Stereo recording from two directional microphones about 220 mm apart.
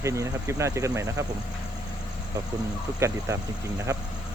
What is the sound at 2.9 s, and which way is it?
Speech, 15° right (ahead or behind).